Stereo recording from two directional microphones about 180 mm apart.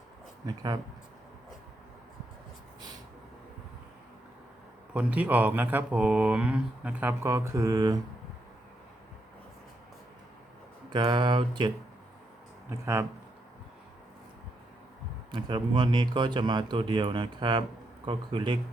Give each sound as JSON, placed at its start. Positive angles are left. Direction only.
{"t": 0.4, "sound": "speech", "side_deg": -20}
{"t": 4.9, "sound": "speech", "side_deg": -10}
{"t": 10.9, "sound": "speech", "side_deg": -25}
{"t": 12.8, "sound": "speech", "side_deg": -15}
{"t": 15.3, "sound": "speech", "side_deg": -25}